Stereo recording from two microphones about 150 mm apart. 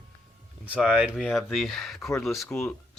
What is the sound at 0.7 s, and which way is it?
Speech, 5° right (ahead or behind).